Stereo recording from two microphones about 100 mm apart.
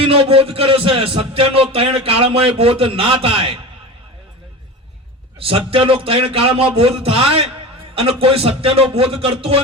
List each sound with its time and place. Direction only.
0.0 s speech: 70° right (ahead or behind)
5.4 s speech: 65° right (ahead or behind)